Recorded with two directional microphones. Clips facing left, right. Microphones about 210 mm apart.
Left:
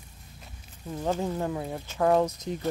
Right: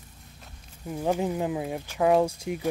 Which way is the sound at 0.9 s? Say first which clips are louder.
Right 2 dB; 10° right (ahead or behind).